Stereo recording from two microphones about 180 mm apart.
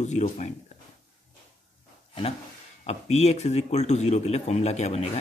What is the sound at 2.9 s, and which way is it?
Speech, 35° left (ahead or behind).